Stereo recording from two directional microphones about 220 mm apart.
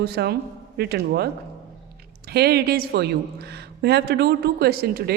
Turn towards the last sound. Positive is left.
turn(degrees=-45)  # may be behind; listen again after turning